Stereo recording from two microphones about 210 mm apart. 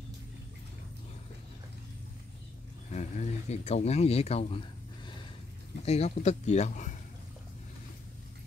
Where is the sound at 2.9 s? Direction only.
30° left (ahead or behind).